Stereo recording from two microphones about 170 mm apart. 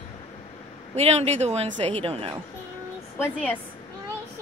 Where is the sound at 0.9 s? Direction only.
40° right (ahead or behind).